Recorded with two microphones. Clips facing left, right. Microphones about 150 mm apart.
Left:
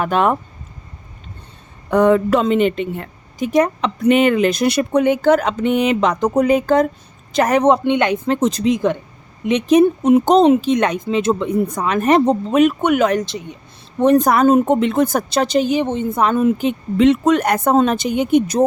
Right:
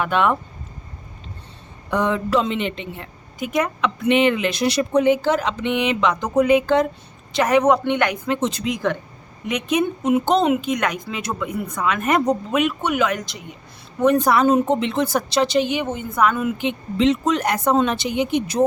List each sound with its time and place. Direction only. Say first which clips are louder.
0.0 s speech: left 3 dB; 40° left (ahead or behind)
1.9 s a woman's voice: left 7 dB; 50° left (ahead or behind)
3.3 s a woman's voice: left 7 dB; 35° left (ahead or behind)
7.6 s a woman's voice: left 3 dB; 25° left (ahead or behind)
8.3 s speech: left 5 dB; 40° left (ahead or behind)
8.6 s a woman's voice: left 6 dB; 20° left (ahead or behind)
12.8 s speech: left 6 dB; 55° left (ahead or behind)
13.1 s speech: left 7 dB; 30° left (ahead or behind)
14.2 s a woman's voice: left 4 dB; 45° left (ahead or behind)